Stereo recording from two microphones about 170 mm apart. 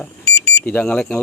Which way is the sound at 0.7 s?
10° left (ahead or behind).